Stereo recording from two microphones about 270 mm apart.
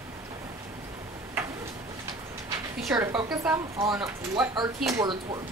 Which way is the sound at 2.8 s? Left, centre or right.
Centre.